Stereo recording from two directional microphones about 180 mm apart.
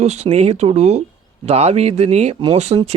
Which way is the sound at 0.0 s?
35° right (ahead or behind).